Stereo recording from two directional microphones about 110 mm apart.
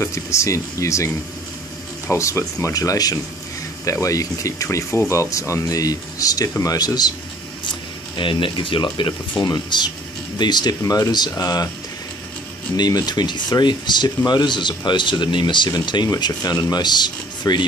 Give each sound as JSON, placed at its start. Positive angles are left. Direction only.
{"t": 0.0, "sound": "speech", "side_deg": 25}
{"t": 8.2, "sound": "speech", "side_deg": 50}
{"t": 12.7, "sound": "speech", "side_deg": 40}